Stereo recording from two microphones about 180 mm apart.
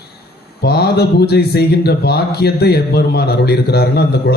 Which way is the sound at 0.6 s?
65° left (ahead or behind).